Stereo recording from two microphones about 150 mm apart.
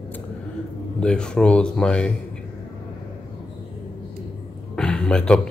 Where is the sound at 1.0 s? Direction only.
5° left (ahead or behind).